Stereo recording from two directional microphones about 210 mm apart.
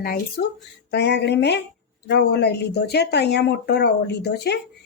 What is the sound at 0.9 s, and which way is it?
A woman's voice, 55° left (ahead or behind).